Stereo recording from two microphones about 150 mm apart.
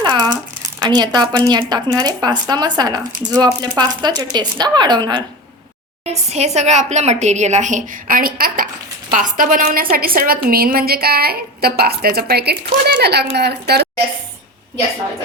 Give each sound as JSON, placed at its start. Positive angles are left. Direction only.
{"t": 0.0, "sound": "a sound", "side_deg": -30}
{"t": 0.8, "sound": "speech", "side_deg": -30}
{"t": 3.0, "sound": "a woman's voice", "side_deg": -65}
{"t": 3.3, "sound": "speech", "side_deg": -30}
{"t": 6.1, "sound": "a woman's voice", "side_deg": -45}
{"t": 10.2, "sound": "a woman's voice", "side_deg": -75}